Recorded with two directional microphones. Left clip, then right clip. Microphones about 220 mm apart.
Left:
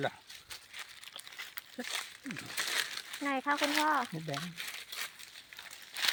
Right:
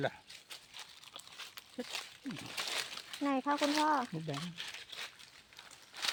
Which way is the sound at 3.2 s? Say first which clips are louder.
Left 1 dB; 15° right (ahead or behind).